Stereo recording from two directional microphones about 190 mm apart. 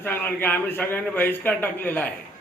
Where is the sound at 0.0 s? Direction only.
10° left (ahead or behind).